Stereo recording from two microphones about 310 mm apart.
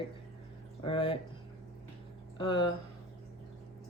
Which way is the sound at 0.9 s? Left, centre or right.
Centre.